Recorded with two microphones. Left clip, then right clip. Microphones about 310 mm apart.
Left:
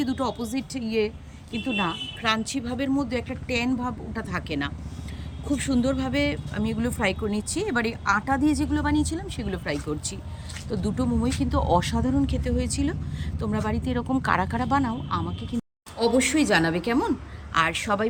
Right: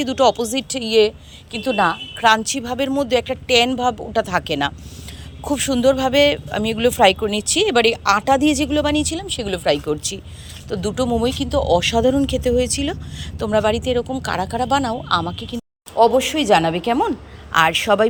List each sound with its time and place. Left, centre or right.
0.0 s speech: centre
0.8 s speech: right
1.6 s speech: centre
13.4 s speech: centre